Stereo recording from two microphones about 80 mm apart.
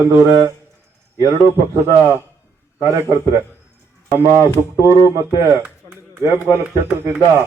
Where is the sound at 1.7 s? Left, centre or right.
Right.